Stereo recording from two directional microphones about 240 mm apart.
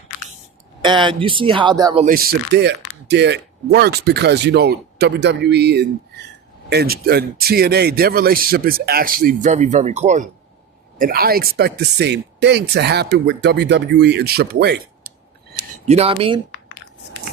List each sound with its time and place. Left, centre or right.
0.8 s speech: centre
2.0 s a man's voice: right
15.9 s speech: right